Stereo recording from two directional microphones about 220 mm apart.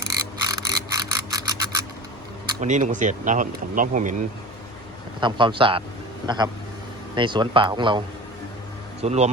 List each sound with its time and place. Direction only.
0.4 s a sound: 15° right (ahead or behind)
2.6 s speech: 35° right (ahead or behind)
5.2 s speech: 20° right (ahead or behind)